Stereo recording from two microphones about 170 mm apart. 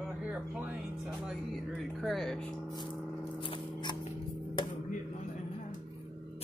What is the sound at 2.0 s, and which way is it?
Speech, centre (ahead or behind).